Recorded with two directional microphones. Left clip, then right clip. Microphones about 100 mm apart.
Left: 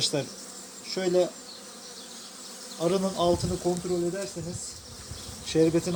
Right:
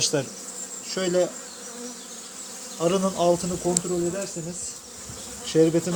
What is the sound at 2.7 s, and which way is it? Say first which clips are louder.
Speech: right 3 dB; 45° right (ahead or behind).